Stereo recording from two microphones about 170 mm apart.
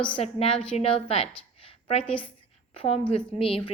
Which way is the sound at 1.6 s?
35° left (ahead or behind).